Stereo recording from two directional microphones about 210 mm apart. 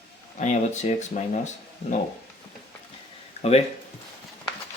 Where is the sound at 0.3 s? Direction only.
35° left (ahead or behind).